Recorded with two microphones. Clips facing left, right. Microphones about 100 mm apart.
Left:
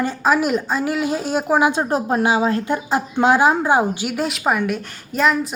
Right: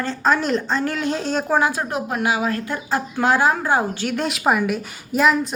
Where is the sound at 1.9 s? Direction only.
30° left (ahead or behind); by 5.5 s centre (ahead or behind).